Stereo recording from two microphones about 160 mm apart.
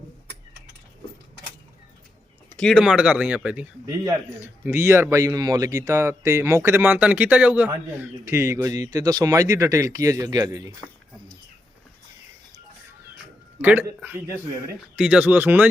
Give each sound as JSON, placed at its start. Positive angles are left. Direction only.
{"t": 2.6, "sound": "a man's voice", "side_deg": 0}
{"t": 13.6, "sound": "a man's voice", "side_deg": -10}